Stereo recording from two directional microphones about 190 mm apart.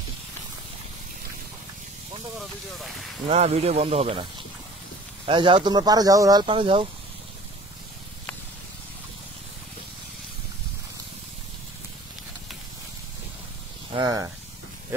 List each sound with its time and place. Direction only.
2.3 s speech: centre (ahead or behind)
3.3 s speech: 35° right (ahead or behind)
5.2 s speech: 25° right (ahead or behind)
13.9 s snake: 20° right (ahead or behind)